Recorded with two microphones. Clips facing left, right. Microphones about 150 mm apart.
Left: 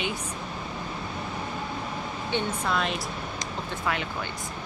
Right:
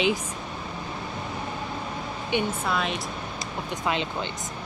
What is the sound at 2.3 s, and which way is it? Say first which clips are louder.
Speech: right 3 dB; 15° right (ahead or behind).